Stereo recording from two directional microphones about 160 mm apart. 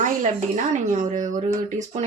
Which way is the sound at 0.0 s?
50° right (ahead or behind).